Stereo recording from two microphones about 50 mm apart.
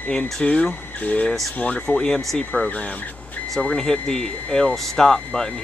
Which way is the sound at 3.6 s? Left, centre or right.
Centre.